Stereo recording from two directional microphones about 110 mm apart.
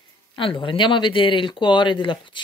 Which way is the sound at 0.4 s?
50° left (ahead or behind).